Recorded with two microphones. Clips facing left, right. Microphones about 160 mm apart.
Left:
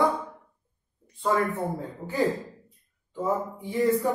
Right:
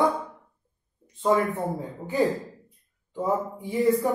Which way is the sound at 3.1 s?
15° right (ahead or behind).